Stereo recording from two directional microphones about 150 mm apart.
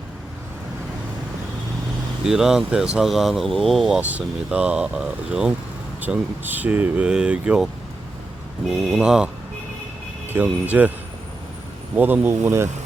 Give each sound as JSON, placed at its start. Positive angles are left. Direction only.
{"t": 2.2, "sound": "speech", "side_deg": -5}
{"t": 11.9, "sound": "speech", "side_deg": -10}